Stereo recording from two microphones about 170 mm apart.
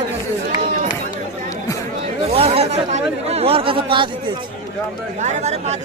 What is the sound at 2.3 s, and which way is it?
Speech, 35° right (ahead or behind).